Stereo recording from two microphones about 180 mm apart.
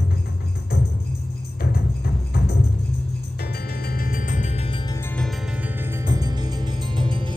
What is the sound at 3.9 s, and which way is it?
Music, 50° left (ahead or behind).